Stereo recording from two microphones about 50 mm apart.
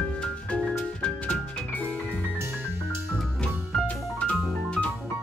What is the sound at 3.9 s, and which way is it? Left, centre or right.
Music, left.